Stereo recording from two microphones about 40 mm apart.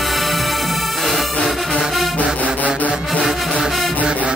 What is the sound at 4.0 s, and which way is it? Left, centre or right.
Music, right.